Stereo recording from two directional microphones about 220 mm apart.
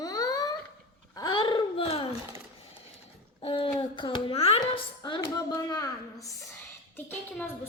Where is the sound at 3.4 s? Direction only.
25° left (ahead or behind).